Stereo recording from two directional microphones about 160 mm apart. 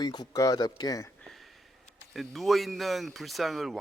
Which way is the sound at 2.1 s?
Centre (ahead or behind).